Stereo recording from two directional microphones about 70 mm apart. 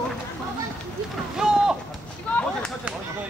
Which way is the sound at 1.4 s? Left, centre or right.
Centre.